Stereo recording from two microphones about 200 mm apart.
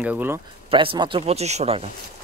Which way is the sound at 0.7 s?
25° right (ahead or behind).